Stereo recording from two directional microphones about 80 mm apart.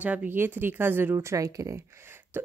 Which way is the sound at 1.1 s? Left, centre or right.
Right.